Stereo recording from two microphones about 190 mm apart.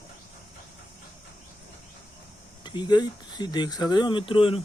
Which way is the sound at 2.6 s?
25° left (ahead or behind).